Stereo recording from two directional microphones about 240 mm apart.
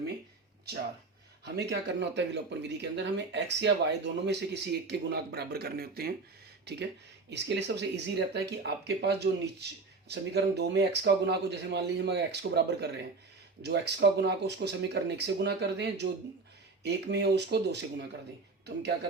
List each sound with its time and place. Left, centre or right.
1.5 s a man's voice: right
7.3 s speech: right